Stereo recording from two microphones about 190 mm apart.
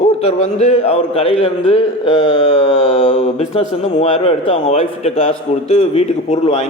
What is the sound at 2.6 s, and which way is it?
A man's voice, 35° left (ahead or behind).